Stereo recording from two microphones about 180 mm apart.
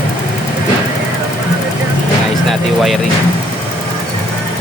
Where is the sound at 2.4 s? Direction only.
Centre (ahead or behind).